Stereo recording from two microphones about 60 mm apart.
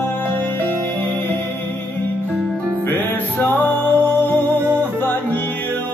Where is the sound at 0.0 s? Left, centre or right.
Left.